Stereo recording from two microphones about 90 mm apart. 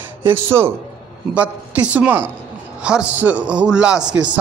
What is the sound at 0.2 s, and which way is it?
Speech, 25° right (ahead or behind).